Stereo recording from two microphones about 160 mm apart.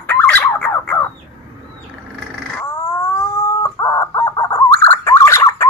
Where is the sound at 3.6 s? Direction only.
20° left (ahead or behind).